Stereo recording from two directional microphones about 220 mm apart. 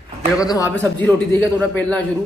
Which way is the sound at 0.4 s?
15° left (ahead or behind).